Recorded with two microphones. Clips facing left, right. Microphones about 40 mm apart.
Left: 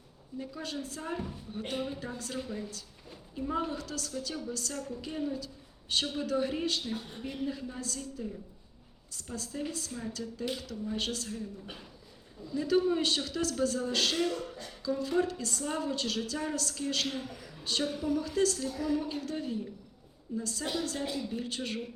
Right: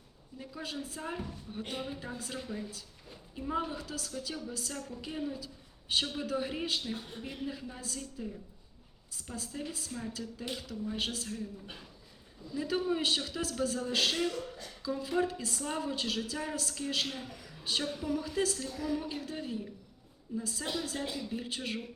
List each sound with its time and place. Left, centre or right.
0.3 s a woman's voice: centre
11.6 s a woman's voice: centre
14.3 s speech: centre
14.8 s a woman's voice: centre
17.1 s a woman's voice: centre
18.7 s a woman's voice: centre
19.0 s a woman's voice: centre